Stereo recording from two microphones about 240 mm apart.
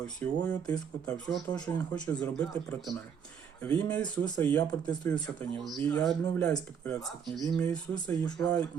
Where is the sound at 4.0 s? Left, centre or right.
Centre.